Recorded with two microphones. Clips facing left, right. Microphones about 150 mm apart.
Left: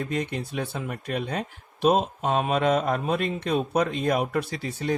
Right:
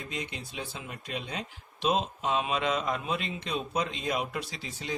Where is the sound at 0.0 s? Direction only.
55° left (ahead or behind).